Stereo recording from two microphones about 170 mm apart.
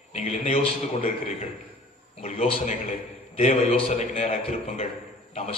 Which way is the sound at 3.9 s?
35° left (ahead or behind).